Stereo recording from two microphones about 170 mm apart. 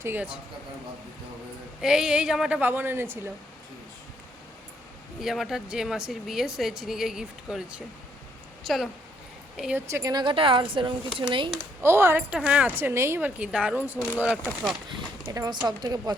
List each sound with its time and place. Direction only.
0.0 s speech: 10° right (ahead or behind)
1.8 s speech: 5° right (ahead or behind)
5.2 s speech: centre (ahead or behind)
9.8 s a woman's voice: 20° right (ahead or behind)
11.8 s speech: 15° right (ahead or behind)
14.4 s speech: 5° left (ahead or behind)
14.8 s a woman's voice: 25° right (ahead or behind)